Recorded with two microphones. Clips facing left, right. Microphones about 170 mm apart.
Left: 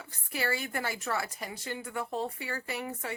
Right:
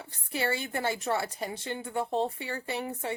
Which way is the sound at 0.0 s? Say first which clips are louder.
Right 3 dB; 25° right (ahead or behind).